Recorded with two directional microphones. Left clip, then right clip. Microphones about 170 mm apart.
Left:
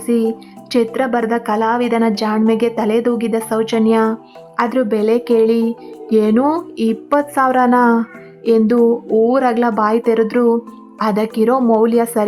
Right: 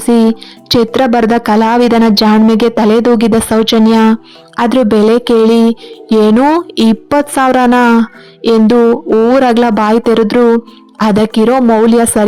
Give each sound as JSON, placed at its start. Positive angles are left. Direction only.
{"t": 0.0, "sound": "speech", "side_deg": -35}